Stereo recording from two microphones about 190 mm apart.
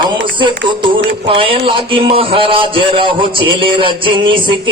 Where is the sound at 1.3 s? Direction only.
25° right (ahead or behind).